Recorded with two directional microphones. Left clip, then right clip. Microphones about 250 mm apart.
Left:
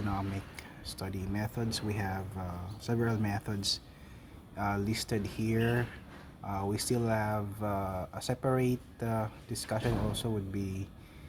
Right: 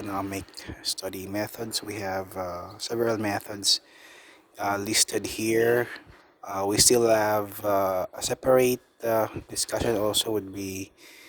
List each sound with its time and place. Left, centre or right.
0.2 s speech: right